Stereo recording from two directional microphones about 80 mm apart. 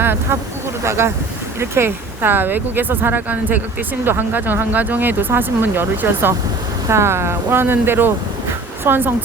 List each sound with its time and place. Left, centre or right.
0.0 s speech: right